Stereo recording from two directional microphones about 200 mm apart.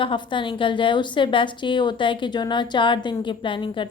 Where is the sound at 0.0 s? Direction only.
25° left (ahead or behind).